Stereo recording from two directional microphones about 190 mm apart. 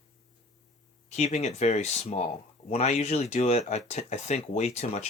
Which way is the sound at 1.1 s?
35° left (ahead or behind).